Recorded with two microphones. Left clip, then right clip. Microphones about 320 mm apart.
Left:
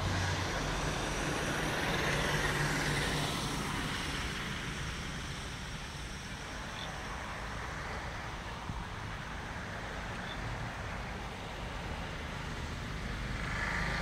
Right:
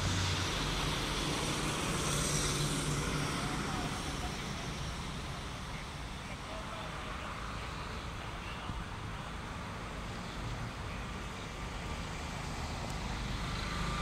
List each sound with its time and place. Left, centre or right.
2.0 s vehicle: left